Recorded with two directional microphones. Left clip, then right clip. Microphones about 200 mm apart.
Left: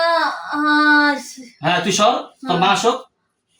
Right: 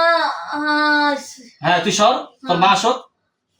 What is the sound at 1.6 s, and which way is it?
Speech, 10° right (ahead or behind).